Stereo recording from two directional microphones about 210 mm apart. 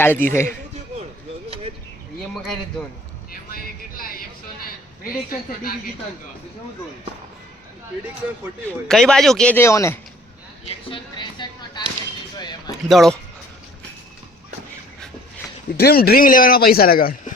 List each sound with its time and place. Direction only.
0.0 s a man's voice: 10° left (ahead or behind)
3.5 s a sound: 45° left (ahead or behind)
8.6 s speech: centre (ahead or behind); by 11.8 s 20° left (ahead or behind)
12.4 s a sound: 20° left (ahead or behind)
12.9 s speech: centre (ahead or behind)
15.8 s speech: 45° left (ahead or behind)